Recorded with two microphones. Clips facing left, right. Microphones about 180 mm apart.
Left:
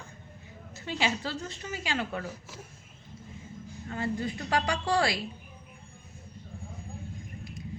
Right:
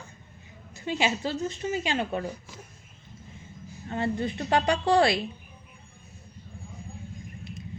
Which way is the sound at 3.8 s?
25° right (ahead or behind).